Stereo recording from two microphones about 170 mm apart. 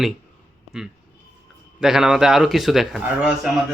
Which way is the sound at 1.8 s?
5° right (ahead or behind).